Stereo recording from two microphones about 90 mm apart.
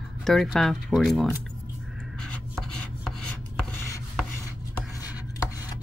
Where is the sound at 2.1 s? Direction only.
5° left (ahead or behind).